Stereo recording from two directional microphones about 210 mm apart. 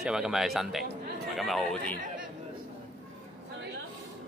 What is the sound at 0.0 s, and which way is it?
Speech, 5° right (ahead or behind).